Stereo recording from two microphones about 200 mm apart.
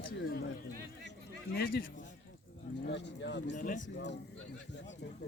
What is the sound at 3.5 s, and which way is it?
Speech, 40° left (ahead or behind).